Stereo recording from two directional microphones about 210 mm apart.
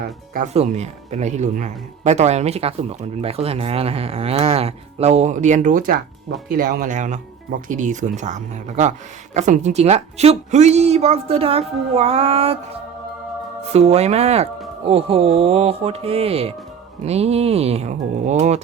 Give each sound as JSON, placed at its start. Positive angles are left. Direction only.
{"t": 0.0, "sound": "speech", "side_deg": -40}
{"t": 13.7, "sound": "speech", "side_deg": -30}